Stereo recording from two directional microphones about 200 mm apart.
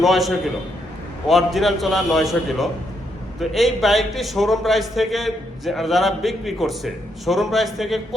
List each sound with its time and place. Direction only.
0.0 s a man's voice: centre (ahead or behind)